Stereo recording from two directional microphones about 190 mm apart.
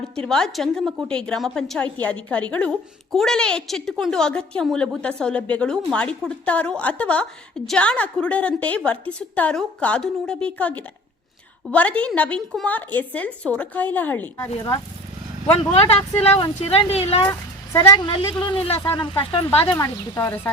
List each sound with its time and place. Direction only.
0.2 s a woman's voice: 5° left (ahead or behind)
15.5 s speech: 30° left (ahead or behind)
17.2 s speech: 15° left (ahead or behind)
18.8 s a woman's voice: 15° left (ahead or behind)
19.2 s speech: 25° left (ahead or behind)
19.7 s a woman's voice: 15° left (ahead or behind)